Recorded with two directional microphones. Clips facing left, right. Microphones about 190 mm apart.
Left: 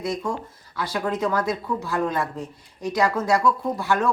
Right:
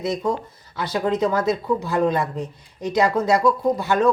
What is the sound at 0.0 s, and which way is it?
Speech, 20° right (ahead or behind).